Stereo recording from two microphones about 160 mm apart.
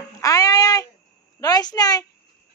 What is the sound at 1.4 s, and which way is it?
Speech, 25° left (ahead or behind).